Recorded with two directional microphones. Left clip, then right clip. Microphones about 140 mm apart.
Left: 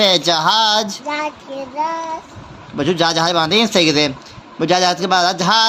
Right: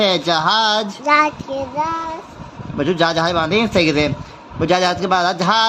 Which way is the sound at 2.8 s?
20° left (ahead or behind).